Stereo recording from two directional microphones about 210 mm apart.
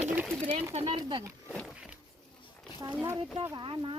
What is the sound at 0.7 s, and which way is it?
Speech, 20° right (ahead or behind).